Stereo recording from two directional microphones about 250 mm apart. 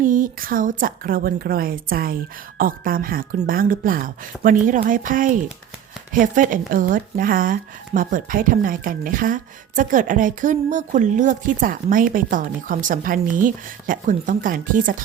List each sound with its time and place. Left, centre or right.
0.0 s speech: right